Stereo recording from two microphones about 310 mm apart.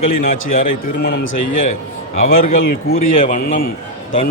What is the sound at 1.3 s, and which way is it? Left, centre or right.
Speech, left.